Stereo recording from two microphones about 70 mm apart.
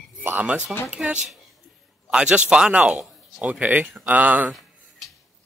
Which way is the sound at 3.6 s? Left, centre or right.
Right.